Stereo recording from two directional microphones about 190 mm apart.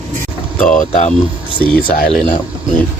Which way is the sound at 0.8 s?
40° left (ahead or behind).